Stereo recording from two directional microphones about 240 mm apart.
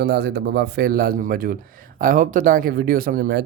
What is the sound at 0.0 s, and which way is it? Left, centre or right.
Speech, right.